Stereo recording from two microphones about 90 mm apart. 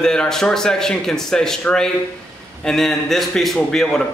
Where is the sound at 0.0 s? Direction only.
5° left (ahead or behind).